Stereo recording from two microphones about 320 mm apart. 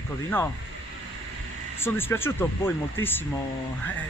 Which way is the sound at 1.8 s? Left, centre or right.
Centre.